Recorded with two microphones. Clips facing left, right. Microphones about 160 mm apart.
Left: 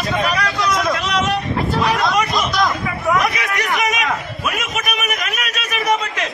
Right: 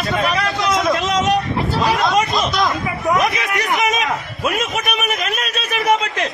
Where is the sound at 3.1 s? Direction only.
25° right (ahead or behind).